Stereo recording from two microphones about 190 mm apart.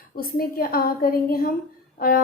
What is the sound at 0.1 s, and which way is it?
A woman's voice, 50° left (ahead or behind).